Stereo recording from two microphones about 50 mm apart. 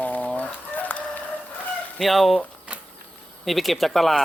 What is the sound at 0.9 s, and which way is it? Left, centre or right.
Chicken, left.